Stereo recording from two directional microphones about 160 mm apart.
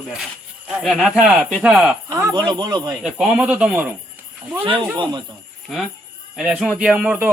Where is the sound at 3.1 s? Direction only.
5° right (ahead or behind).